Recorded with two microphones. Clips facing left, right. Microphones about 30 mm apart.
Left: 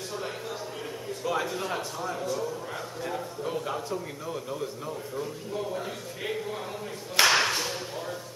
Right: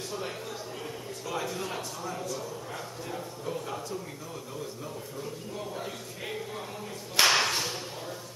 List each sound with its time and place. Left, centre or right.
1.2 s a man's voice: centre
5.2 s speech: centre
7.2 s a sound: centre